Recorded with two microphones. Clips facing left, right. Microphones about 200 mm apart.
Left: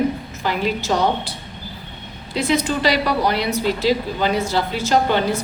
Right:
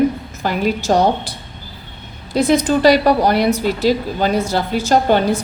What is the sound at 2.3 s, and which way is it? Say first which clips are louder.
Speech: right 6 dB; 50° right (ahead or behind).